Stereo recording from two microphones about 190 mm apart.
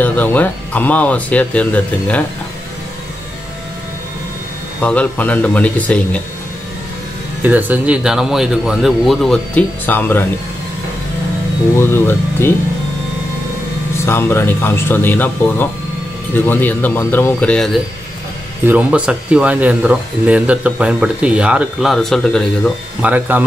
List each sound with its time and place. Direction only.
0.0 s speech: 10° left (ahead or behind)
4.8 s speech: 5° left (ahead or behind)
7.4 s speech: 10° right (ahead or behind); by 10.2 s 10° left (ahead or behind)
11.8 s speech: 10° left (ahead or behind)
14.0 s speech: 15° left (ahead or behind)
18.7 s speech: 5° right (ahead or behind)
23.0 s speech: 10° right (ahead or behind)